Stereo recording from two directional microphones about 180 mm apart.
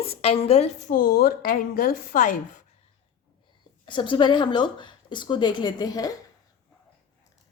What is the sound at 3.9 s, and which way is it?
Speech, 25° left (ahead or behind).